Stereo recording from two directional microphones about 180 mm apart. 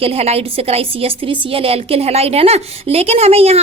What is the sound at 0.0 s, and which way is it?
A woman's voice, 35° right (ahead or behind).